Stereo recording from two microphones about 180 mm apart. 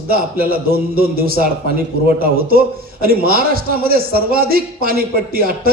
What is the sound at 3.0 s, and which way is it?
A man's voice, 55° right (ahead or behind).